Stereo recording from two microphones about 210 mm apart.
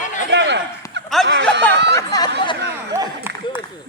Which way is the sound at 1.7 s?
55° right (ahead or behind).